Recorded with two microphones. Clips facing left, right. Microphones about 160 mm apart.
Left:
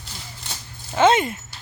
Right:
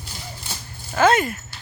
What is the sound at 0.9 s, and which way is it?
Speech, 20° left (ahead or behind).